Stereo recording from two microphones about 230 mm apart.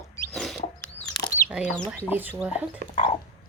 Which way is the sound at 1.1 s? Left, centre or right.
Centre.